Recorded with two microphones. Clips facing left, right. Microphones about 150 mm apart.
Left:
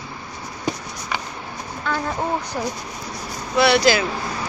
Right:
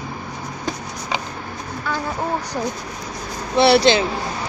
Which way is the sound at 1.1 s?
15° right (ahead or behind).